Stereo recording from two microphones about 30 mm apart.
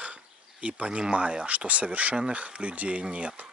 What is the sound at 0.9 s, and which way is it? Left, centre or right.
Speech, right.